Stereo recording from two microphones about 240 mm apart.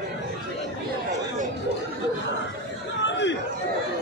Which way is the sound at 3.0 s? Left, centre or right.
Left.